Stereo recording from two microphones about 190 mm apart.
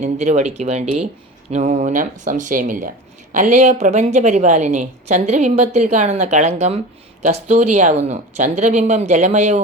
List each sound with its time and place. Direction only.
0.0 s a woman's voice: 40° right (ahead or behind)